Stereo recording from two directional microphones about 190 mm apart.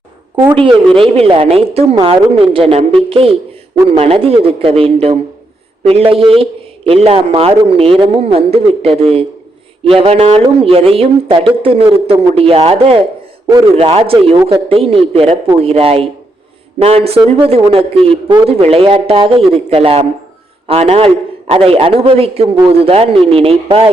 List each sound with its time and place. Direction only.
0.9 s a man's voice: 30° right (ahead or behind)